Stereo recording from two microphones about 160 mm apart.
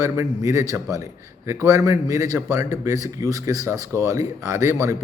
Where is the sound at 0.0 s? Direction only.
20° right (ahead or behind).